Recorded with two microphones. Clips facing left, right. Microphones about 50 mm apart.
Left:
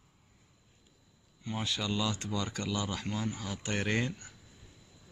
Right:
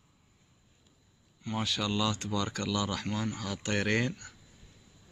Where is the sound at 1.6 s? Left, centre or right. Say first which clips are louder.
Right 2 dB; right.